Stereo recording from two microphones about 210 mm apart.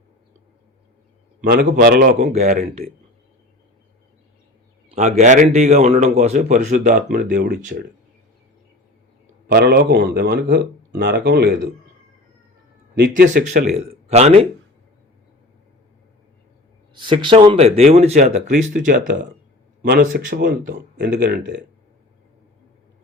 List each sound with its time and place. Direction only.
1.4 s speech: 45° right (ahead or behind)
4.9 s speech: 35° right (ahead or behind)
9.5 s speech: 50° right (ahead or behind)
13.0 s speech: 40° right (ahead or behind)
16.9 s speech: 20° right (ahead or behind); by 21.6 s 55° right (ahead or behind)